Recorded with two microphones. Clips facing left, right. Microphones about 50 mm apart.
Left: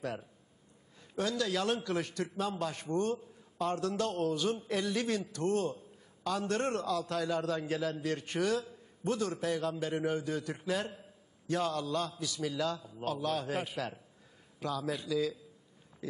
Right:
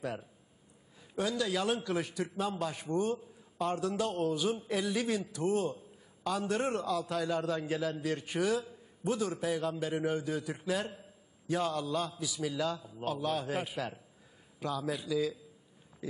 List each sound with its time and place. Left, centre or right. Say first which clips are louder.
0.0 s a man's voice: even; centre